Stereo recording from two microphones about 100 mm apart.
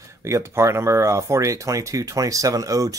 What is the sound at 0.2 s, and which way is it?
Speech, 30° right (ahead or behind).